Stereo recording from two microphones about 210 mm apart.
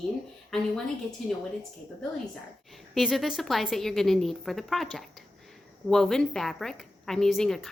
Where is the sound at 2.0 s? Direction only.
Centre (ahead or behind).